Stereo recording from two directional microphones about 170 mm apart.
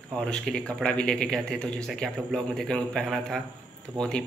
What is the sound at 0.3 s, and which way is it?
Speech, 5° left (ahead or behind).